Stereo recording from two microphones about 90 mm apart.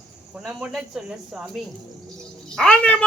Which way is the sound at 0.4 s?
5° right (ahead or behind).